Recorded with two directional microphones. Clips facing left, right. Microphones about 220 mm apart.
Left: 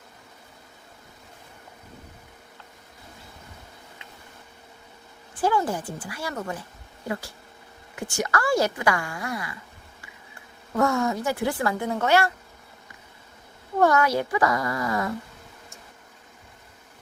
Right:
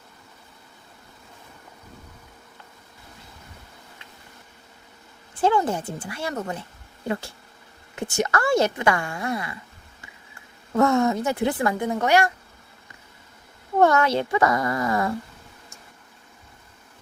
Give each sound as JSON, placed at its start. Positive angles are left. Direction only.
{"t": 5.4, "sound": "a woman's voice", "side_deg": -25}
{"t": 10.8, "sound": "a woman's voice", "side_deg": -25}
{"t": 13.8, "sound": "a woman's voice", "side_deg": -25}